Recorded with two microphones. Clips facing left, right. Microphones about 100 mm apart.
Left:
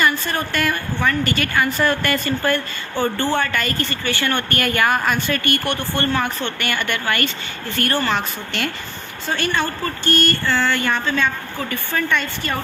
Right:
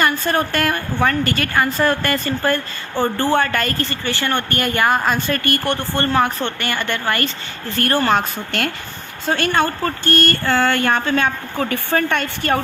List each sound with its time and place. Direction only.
0.0 s a woman's voice: 45° right (ahead or behind); by 5.2 s 25° right (ahead or behind)
5.3 s speech: 40° right (ahead or behind)
7.8 s speech: 45° right (ahead or behind)